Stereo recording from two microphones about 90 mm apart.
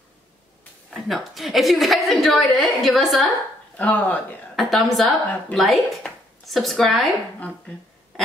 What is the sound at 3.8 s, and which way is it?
Speech, 15° left (ahead or behind).